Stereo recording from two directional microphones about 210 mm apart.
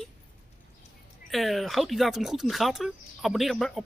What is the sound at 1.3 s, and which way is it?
Speech, centre (ahead or behind).